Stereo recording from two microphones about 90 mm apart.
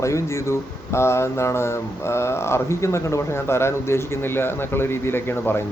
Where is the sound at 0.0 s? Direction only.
35° left (ahead or behind).